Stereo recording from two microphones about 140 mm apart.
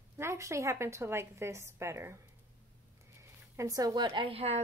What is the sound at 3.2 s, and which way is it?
Speech, 20° right (ahead or behind).